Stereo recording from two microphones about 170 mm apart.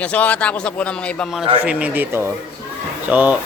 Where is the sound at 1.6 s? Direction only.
10° right (ahead or behind).